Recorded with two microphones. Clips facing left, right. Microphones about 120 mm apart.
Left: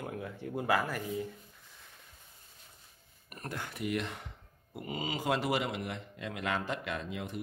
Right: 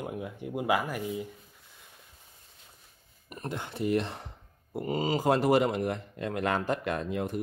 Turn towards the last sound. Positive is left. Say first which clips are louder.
# right 7 dB
turn(degrees=-45)  # may be behind; listen again after turning